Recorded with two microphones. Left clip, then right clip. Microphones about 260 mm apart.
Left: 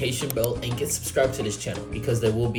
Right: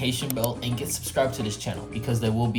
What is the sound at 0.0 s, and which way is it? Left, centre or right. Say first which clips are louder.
Speech: left 2 dB; centre.